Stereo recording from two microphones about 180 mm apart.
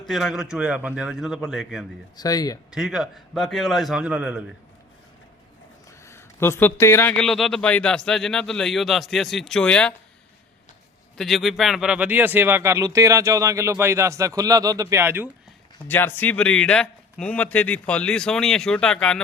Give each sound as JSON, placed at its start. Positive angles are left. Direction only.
{"t": 0.0, "sound": "a man's voice", "side_deg": 0}
{"t": 2.1, "sound": "a man's voice", "side_deg": 20}
{"t": 2.6, "sound": "a man's voice", "side_deg": -5}
{"t": 6.1, "sound": "a man's voice", "side_deg": 15}
{"t": 7.3, "sound": "a man's voice", "side_deg": 0}
{"t": 11.2, "sound": "speech", "side_deg": 0}
{"t": 15.9, "sound": "a man's voice", "side_deg": 10}